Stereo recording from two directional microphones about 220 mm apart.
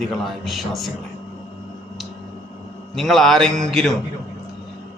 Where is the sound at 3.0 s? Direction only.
Centre (ahead or behind).